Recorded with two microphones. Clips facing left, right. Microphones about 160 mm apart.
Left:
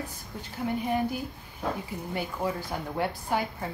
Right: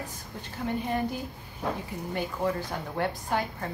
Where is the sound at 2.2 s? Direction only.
10° left (ahead or behind).